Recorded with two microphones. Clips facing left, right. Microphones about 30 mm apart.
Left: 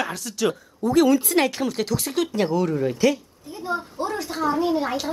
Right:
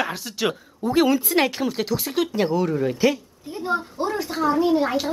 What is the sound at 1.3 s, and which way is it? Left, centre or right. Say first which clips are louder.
Speech: even; centre.